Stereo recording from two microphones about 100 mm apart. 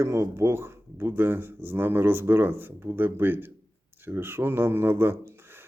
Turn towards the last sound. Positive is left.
turn(degrees=-20)  # may be behind; listen again after turning